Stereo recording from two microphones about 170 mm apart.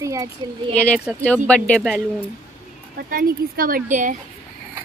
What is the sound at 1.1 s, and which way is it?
Speech, centre (ahead or behind).